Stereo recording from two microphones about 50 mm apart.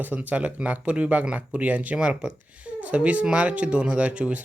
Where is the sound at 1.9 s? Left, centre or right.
Centre.